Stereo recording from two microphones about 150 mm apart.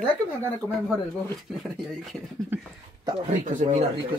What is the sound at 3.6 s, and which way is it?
Speech, 50° right (ahead or behind).